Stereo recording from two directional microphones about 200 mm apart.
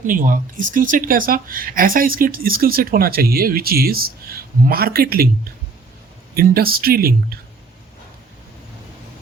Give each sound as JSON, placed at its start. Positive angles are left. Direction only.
{"t": 0.0, "sound": "speech", "side_deg": -40}
{"t": 6.3, "sound": "speech", "side_deg": -50}